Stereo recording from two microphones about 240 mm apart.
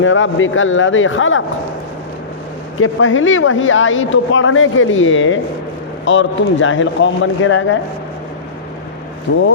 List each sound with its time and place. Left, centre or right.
0.0 s speech: left
2.7 s a man's voice: left
9.3 s a man's voice: left